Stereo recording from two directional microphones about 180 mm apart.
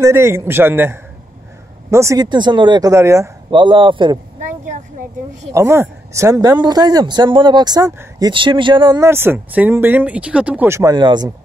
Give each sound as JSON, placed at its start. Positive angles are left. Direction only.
{"t": 0.0, "sound": "a man's voice", "side_deg": -15}
{"t": 5.5, "sound": "speech", "side_deg": -15}